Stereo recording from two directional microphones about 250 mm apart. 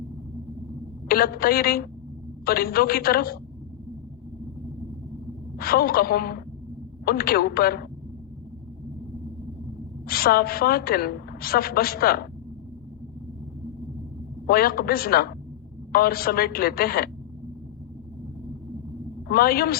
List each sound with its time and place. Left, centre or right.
1.0 s a woman's voice: left
5.5 s a woman's voice: left
10.1 s a woman's voice: left
14.4 s a woman's voice: left
19.3 s a woman's voice: left